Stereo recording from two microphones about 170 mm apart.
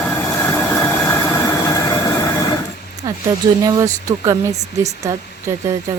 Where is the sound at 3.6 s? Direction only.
20° right (ahead or behind).